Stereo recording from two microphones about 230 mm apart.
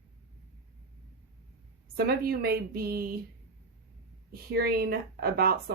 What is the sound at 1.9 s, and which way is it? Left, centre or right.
Speech, right.